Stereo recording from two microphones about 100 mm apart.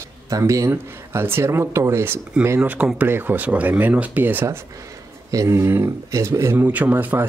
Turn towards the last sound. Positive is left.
turn(degrees=-15)  # may be behind; listen again after turning